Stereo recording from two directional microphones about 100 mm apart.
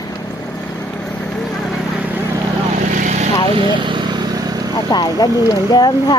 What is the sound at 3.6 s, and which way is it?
Vehicle, 55° right (ahead or behind).